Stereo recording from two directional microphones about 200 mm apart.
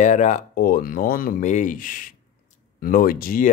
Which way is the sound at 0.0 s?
35° left (ahead or behind).